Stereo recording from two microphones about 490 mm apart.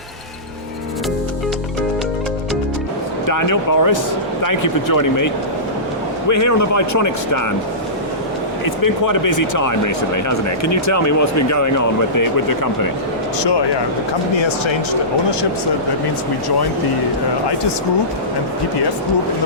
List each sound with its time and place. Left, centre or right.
3.2 s speech: left
8.8 s speech: left
13.4 s speech: left